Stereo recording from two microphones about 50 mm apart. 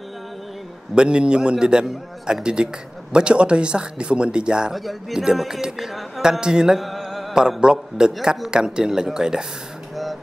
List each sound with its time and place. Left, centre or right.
0.9 s a man's voice: centre
4.7 s a man's voice: centre
6.8 s music: centre
7.6 s a man's voice: centre